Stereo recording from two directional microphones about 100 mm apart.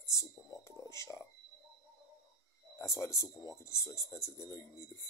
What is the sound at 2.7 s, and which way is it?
Speech, 30° left (ahead or behind).